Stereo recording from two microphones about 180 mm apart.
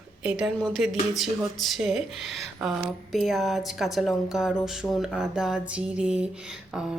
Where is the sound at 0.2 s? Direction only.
5° right (ahead or behind).